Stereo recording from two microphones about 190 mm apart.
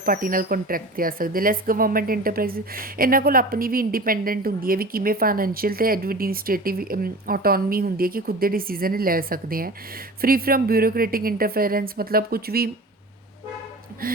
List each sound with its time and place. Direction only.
0.0 s speech: 50° right (ahead or behind)
14.0 s speech: 50° right (ahead or behind)